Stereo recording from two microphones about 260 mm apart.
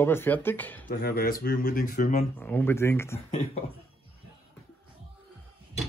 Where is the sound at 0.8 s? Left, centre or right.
Left.